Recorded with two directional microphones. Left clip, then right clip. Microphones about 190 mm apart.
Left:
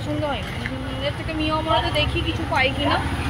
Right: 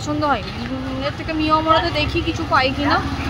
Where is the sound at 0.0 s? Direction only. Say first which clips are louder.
Right 6 dB; 40° right (ahead or behind).